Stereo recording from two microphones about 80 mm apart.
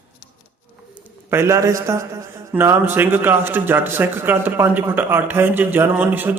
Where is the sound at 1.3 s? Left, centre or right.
Right.